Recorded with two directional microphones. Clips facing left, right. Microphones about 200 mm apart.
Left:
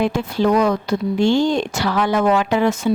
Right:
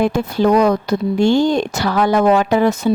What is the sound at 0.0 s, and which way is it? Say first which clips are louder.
Speech: right 3 dB; 45° right (ahead or behind).